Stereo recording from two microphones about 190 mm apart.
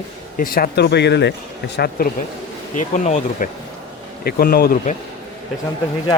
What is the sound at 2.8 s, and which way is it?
Speech, 40° left (ahead or behind).